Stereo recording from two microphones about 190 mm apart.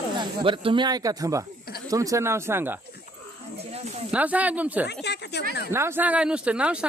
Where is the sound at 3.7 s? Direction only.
30° right (ahead or behind).